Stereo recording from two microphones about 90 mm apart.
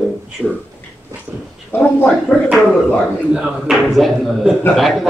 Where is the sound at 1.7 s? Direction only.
25° left (ahead or behind).